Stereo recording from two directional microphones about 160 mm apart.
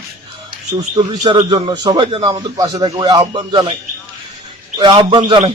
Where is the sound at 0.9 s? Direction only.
30° right (ahead or behind).